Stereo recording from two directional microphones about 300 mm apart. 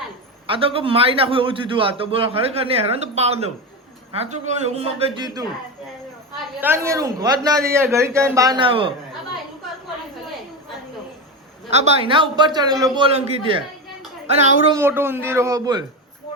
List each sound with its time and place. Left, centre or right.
0.4 s a man's voice: centre
6.6 s a man's voice: centre
11.7 s a man's voice: right
14.8 s a man's voice: centre